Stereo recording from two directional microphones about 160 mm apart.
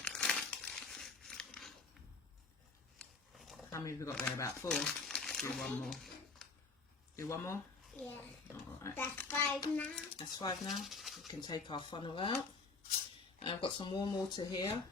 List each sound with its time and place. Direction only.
0.0 s crumpling: 5° left (ahead or behind)
3.0 s a sound: centre (ahead or behind)
3.7 s speech: 20° left (ahead or behind)
4.7 s crumpling: 5° left (ahead or behind)
7.2 s speech: 15° left (ahead or behind)
10.2 s speech: 25° left (ahead or behind)
10.6 s speech: centre (ahead or behind)
11.3 s speech: 25° left (ahead or behind)
13.4 s speech: 30° left (ahead or behind)